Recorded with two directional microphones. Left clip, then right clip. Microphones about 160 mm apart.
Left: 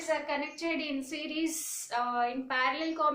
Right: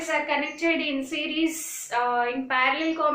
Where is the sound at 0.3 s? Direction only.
30° left (ahead or behind).